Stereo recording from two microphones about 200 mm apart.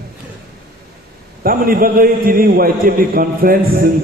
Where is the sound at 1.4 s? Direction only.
45° right (ahead or behind).